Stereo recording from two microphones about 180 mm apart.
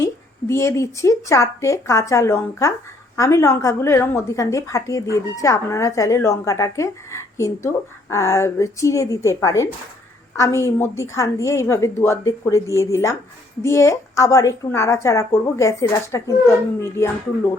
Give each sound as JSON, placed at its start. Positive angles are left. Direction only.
{"t": 0.0, "sound": "a woman's voice", "side_deg": 15}